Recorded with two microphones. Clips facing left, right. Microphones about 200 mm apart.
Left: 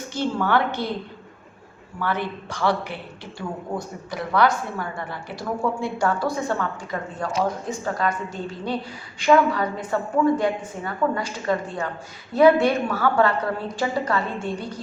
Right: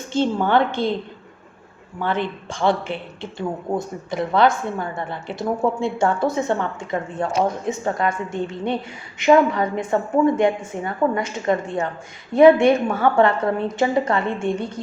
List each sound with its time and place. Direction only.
0.1 s a man's voice: 25° right (ahead or behind)
2.0 s a man's voice: 20° right (ahead or behind)